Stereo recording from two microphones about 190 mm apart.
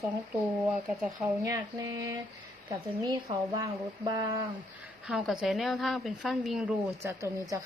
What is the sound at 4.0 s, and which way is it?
Speech, 20° right (ahead or behind).